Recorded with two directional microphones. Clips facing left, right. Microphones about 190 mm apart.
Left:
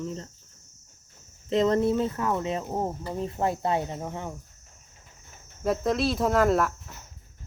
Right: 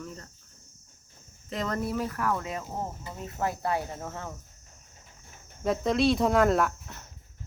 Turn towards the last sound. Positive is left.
turn(degrees=0)  # may be behind; listen again after turning